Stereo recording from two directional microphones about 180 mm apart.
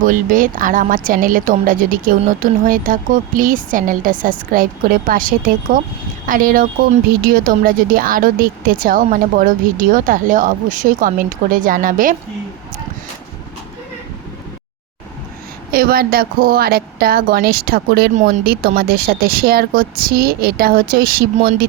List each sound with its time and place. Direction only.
0.0 s speech: 45° right (ahead or behind)
15.7 s speech: 55° right (ahead or behind)